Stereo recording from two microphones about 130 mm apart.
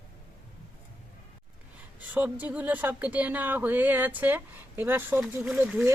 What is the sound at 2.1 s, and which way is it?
Speech, 10° right (ahead or behind).